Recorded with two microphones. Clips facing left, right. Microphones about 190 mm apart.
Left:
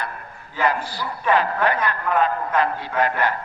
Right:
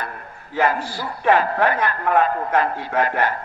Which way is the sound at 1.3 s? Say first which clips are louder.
Right 2 dB; 45° right (ahead or behind).